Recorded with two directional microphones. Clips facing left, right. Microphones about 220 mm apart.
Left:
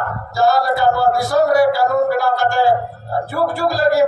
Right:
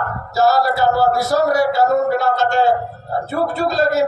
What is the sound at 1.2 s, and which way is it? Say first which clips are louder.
A man's voice: left 2 dB; 20° right (ahead or behind).